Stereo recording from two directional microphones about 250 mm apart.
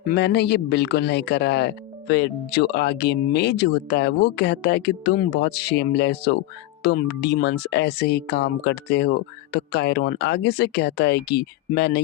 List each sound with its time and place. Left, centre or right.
0.1 s speech: left